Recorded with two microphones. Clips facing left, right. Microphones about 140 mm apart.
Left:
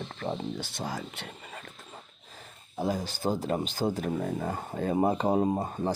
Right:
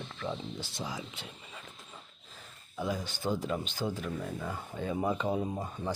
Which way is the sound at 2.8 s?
35° left (ahead or behind).